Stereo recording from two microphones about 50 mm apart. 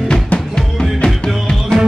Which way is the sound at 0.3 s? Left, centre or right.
Left.